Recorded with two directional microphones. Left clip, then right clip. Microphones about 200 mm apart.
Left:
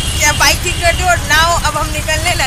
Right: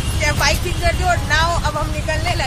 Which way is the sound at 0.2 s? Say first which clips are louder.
Left 6 dB; 10° left (ahead or behind).